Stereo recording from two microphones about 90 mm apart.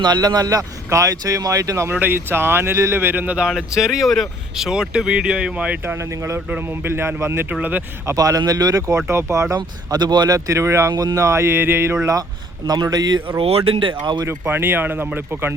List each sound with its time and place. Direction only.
0.0 s speech: 50° right (ahead or behind)
1.9 s a man's voice: 20° right (ahead or behind)
3.8 s speech: 5° right (ahead or behind)
5.8 s a man's voice: 30° right (ahead or behind)
8.0 s speech: 40° right (ahead or behind)
9.6 s speech: 55° right (ahead or behind); by 11.9 s 25° right (ahead or behind)
12.6 s a man's voice: 45° right (ahead or behind)
13.4 s speech: 80° right; by 14.2 s 65° right (ahead or behind)
14.3 s a man's voice: 25° right (ahead or behind)